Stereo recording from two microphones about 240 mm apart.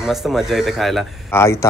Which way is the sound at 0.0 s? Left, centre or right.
Centre.